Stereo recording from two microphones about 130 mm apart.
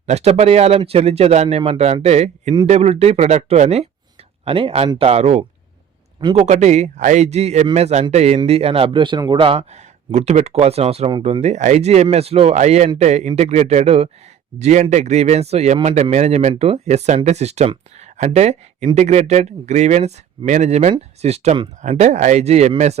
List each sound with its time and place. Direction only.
0.0 s speech: 55° right (ahead or behind)
4.4 s speech: 45° right (ahead or behind)
9.6 s speech: 60° right (ahead or behind)
21.8 s speech: 65° right (ahead or behind)